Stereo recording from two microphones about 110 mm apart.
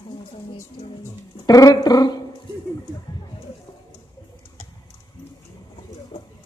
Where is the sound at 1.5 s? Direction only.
35° left (ahead or behind).